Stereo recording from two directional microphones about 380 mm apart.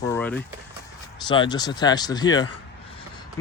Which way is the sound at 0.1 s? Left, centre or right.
Centre.